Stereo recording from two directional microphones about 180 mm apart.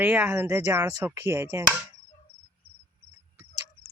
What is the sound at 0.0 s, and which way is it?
Speech, 10° right (ahead or behind).